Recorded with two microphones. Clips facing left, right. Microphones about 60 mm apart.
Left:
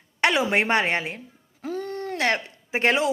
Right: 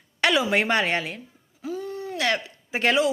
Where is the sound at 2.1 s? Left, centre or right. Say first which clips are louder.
Left 1 dB; left.